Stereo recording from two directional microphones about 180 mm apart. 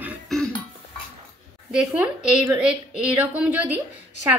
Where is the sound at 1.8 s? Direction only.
5° right (ahead or behind).